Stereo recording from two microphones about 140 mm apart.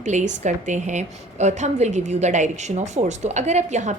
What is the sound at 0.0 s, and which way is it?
A woman's voice, 60° right (ahead or behind).